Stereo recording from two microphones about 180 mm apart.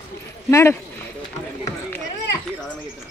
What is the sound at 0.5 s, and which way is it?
Speech, 15° left (ahead or behind).